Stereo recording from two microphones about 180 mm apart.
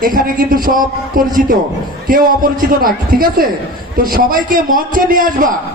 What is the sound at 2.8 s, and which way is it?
A man's voice, 55° right (ahead or behind).